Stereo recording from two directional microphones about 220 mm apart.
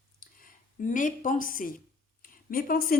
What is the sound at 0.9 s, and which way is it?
A woman's voice, 35° left (ahead or behind).